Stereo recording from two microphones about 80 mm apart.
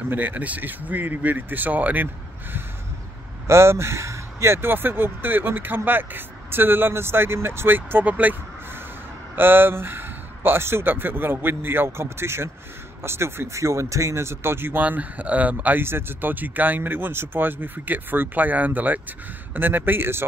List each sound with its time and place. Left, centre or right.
0.1 s speech: right
3.4 s speech: right